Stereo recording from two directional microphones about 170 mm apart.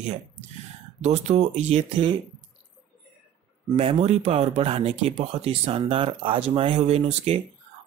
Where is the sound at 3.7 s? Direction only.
35° right (ahead or behind).